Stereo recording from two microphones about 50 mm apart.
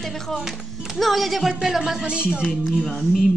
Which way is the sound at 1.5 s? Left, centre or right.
Centre.